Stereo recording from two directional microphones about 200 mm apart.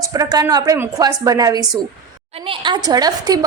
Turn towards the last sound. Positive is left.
turn(degrees=-20)  # may be behind; listen again after turning